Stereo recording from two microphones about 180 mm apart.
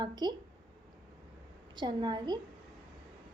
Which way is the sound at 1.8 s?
25° right (ahead or behind).